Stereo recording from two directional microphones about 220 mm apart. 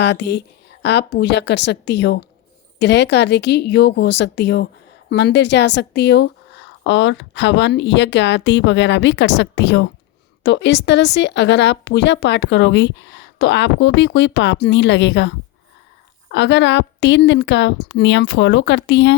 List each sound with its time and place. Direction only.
0.0 s a woman's voice: 50° left (ahead or behind)